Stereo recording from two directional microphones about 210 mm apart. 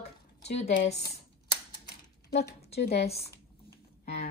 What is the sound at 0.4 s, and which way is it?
Speech, 30° left (ahead or behind).